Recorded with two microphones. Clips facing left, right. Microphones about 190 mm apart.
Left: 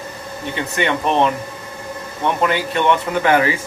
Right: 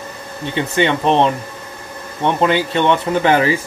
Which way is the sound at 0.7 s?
30° right (ahead or behind).